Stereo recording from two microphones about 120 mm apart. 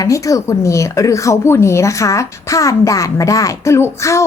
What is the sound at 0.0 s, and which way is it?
A woman's voice, 25° left (ahead or behind).